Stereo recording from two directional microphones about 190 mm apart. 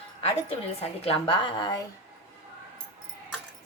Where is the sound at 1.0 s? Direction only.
30° left (ahead or behind).